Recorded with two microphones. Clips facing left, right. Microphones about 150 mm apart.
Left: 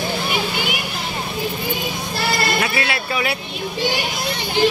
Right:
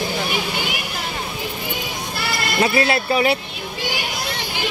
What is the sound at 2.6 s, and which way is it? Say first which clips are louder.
Speech: right 4 dB; 35° right (ahead or behind).